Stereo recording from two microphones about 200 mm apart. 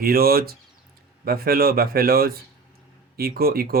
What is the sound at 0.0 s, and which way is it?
Speech, 50° right (ahead or behind).